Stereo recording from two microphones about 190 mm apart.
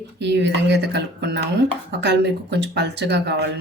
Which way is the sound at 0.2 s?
65° right (ahead or behind).